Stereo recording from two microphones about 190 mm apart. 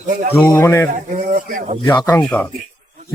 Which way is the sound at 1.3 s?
45° right (ahead or behind).